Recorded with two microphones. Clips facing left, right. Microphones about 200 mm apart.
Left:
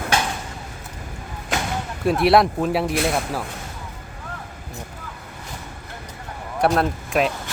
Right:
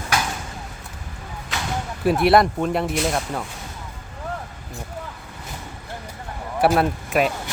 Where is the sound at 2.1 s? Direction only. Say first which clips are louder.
Even; centre (ahead or behind).